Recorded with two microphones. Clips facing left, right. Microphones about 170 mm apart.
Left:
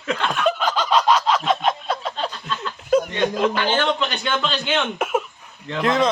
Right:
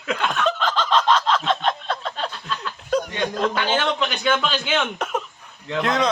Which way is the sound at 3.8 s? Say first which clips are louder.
Left 1 dB; centre (ahead or behind).